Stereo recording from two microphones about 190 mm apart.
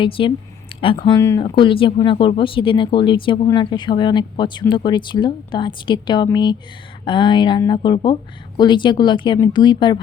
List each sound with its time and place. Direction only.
0.0 s speech: 25° left (ahead or behind)
0.7 s a sound: 30° left (ahead or behind)
1.0 s speech: 20° left (ahead or behind)